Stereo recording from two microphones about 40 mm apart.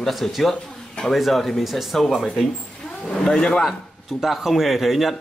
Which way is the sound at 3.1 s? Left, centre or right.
Left.